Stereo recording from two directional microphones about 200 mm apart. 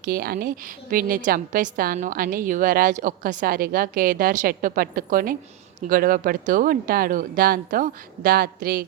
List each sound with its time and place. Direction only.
0.0 s a woman's voice: 50° right (ahead or behind)